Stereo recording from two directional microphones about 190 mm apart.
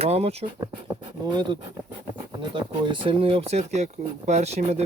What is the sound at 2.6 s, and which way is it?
Speech, 25° right (ahead or behind).